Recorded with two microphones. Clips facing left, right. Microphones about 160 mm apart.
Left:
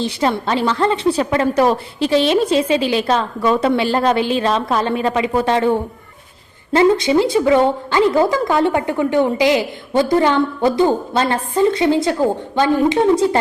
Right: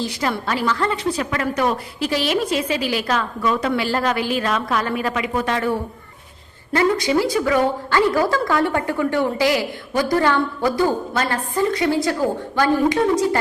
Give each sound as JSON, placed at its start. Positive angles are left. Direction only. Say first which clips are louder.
{"t": 0.0, "sound": "a woman's voice", "louder": "left 5 dB", "side_deg": 25}